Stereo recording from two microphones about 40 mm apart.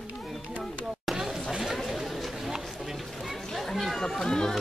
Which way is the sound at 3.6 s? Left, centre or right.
Centre.